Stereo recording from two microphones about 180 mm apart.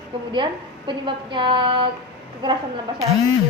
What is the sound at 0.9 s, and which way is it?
A woman's voice, 25° right (ahead or behind).